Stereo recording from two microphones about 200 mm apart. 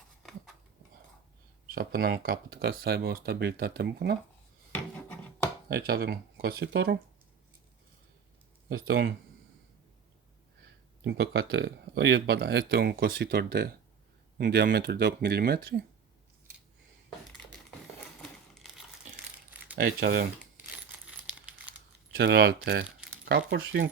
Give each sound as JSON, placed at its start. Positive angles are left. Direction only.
{"t": 0.2, "sound": "a sound", "side_deg": 0}
{"t": 1.7, "sound": "speech", "side_deg": -50}
{"t": 4.7, "sound": "a sound", "side_deg": 10}
{"t": 5.6, "sound": "speech", "side_deg": -50}
{"t": 8.7, "sound": "speech", "side_deg": -50}
{"t": 11.0, "sound": "speech", "side_deg": -55}
{"t": 18.2, "sound": "a sound", "side_deg": 0}
{"t": 19.7, "sound": "speech", "side_deg": -50}
{"t": 21.2, "sound": "crumpling", "side_deg": -5}
{"t": 22.1, "sound": "speech", "side_deg": -50}
{"t": 23.6, "sound": "speech", "side_deg": -65}